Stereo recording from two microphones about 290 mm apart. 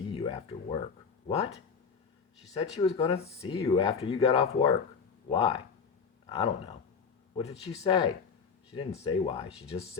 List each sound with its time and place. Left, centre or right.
0.0 s speech: centre